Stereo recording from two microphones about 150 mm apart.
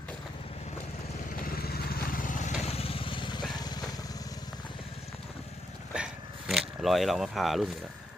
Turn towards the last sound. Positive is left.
turn(degrees=0)  # may be behind; listen again after turning